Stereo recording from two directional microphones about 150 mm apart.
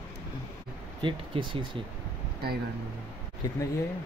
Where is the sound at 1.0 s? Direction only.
35° right (ahead or behind).